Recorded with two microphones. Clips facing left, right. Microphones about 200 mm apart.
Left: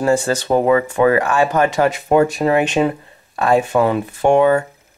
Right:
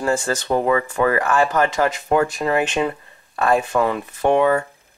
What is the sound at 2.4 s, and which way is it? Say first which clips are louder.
Speech: left 4 dB; 35° left (ahead or behind).